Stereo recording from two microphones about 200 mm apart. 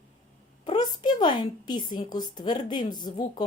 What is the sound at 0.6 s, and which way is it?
A woman's voice, 20° left (ahead or behind).